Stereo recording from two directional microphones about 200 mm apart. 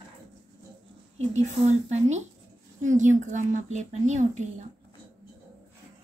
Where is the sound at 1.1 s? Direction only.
35° right (ahead or behind).